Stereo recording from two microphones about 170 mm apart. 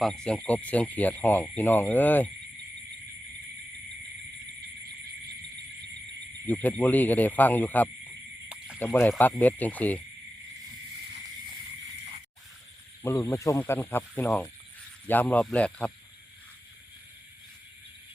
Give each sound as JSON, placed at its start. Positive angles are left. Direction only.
{"t": 0.0, "sound": "speech", "side_deg": 5}
{"t": 6.4, "sound": "speech", "side_deg": 10}
{"t": 8.4, "sound": "a sound", "side_deg": -5}
{"t": 8.8, "sound": "speech", "side_deg": 10}
{"t": 13.2, "sound": "speech", "side_deg": 20}